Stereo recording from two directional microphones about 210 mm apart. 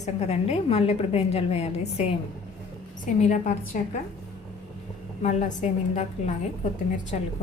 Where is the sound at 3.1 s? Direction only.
35° left (ahead or behind).